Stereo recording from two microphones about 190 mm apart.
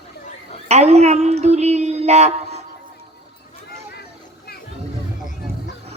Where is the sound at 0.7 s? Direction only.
35° right (ahead or behind).